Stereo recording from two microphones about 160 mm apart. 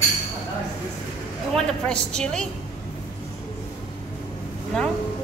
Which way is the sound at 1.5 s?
5° left (ahead or behind).